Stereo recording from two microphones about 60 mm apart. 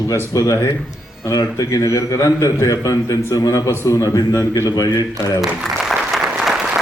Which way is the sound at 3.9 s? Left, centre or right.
Left.